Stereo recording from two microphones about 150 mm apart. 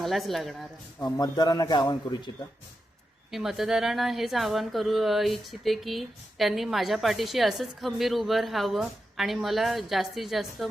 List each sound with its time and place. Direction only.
0.0 s a woman's voice: centre (ahead or behind)
1.0 s a man's voice: 25° left (ahead or behind)
3.3 s a woman's voice: centre (ahead or behind)